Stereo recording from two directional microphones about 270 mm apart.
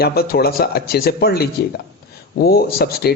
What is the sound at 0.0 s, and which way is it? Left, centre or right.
A man's voice, left.